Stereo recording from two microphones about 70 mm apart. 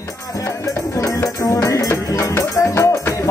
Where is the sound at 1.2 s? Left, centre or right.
Left.